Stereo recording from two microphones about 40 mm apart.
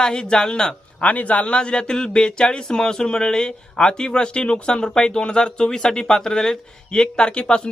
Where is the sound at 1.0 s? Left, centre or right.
Left.